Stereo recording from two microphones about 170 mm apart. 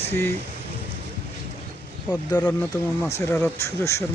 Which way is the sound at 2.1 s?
25° left (ahead or behind).